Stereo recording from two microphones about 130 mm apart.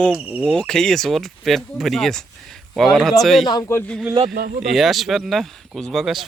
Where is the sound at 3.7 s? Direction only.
20° left (ahead or behind).